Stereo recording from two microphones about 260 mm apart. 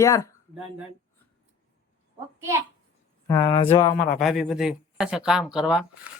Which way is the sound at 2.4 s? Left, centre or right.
Centre.